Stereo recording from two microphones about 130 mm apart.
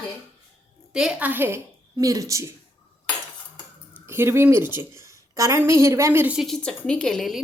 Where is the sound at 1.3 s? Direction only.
15° right (ahead or behind).